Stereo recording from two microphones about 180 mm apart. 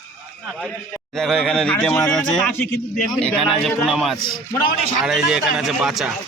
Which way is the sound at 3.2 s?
5° left (ahead or behind).